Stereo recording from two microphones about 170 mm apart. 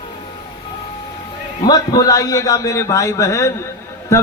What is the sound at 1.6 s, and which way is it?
A man's voice, 20° left (ahead or behind).